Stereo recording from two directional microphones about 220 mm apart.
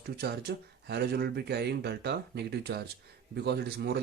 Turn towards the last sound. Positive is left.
turn(degrees=-45)  # may be behind; listen again after turning